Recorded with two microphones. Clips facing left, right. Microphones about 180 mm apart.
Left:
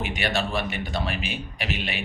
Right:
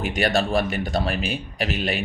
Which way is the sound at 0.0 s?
45° right (ahead or behind).